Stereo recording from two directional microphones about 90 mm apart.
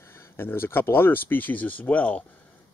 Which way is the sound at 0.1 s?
25° left (ahead or behind).